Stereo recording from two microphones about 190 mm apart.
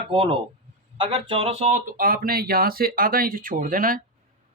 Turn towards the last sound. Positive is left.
turn(degrees=-50)  # may be behind; listen again after turning